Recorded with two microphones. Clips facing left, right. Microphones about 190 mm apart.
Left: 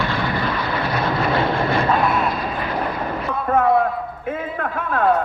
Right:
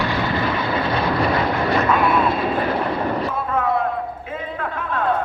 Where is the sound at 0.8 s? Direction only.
30° right (ahead or behind).